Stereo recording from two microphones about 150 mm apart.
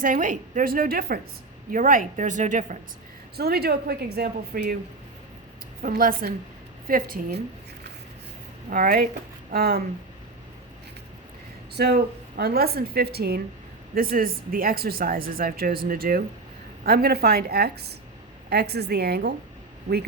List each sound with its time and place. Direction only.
0.0 s speech: 60° right (ahead or behind); by 1.2 s 85° right
1.7 s speech: 65° right (ahead or behind)
3.3 s a woman's voice: 90° right
5.8 s speech: 70° right (ahead or behind)
6.8 s speech: 70° right (ahead or behind)
8.7 s speech: 75° right (ahead or behind)
9.5 s a woman's voice: 90° right
11.7 s a woman's voice: 90° right
13.9 s speech: 75° right (ahead or behind)
16.8 s a woman's voice: 90° right